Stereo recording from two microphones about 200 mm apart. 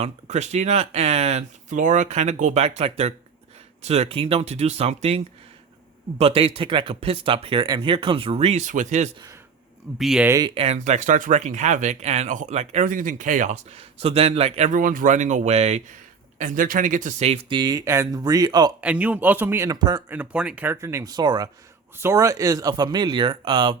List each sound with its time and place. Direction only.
0.0 s speech: 35° right (ahead or behind)
10.0 s speech: centre (ahead or behind)
10.2 s a man's voice: 15° right (ahead or behind)
10.5 s speech: 30° right (ahead or behind)
18.8 s a man's voice: 5° right (ahead or behind)
20.1 s a man's voice: 5° right (ahead or behind); by 23.7 s 25° right (ahead or behind)